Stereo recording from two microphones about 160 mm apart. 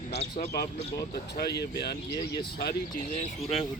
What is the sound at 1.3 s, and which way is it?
Speech, 90° left.